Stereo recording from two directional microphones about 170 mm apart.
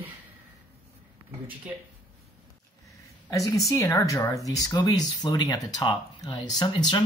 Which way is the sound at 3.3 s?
20° left (ahead or behind).